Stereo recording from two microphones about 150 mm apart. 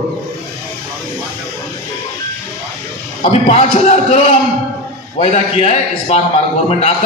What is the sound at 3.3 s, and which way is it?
A man's voice, 45° left (ahead or behind).